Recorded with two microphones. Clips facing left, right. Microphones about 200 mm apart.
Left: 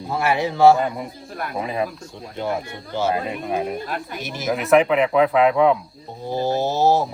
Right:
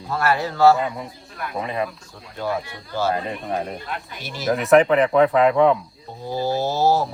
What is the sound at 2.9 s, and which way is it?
Speech, 20° left (ahead or behind).